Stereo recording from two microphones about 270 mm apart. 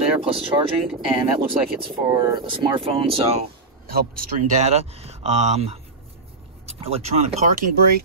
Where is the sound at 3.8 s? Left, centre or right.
Right.